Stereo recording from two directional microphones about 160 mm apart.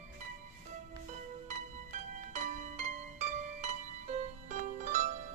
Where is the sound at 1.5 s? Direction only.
50° right (ahead or behind).